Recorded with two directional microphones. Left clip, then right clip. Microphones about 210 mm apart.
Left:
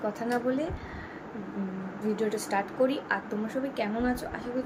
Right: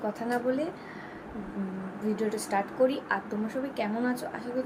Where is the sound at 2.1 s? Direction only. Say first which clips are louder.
Even; 5° left (ahead or behind).